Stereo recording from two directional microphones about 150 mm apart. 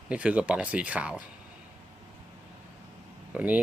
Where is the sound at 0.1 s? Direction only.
10° right (ahead or behind).